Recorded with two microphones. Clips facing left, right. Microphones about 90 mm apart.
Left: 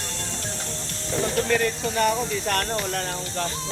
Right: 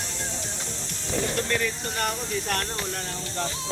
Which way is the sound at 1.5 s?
60° left (ahead or behind).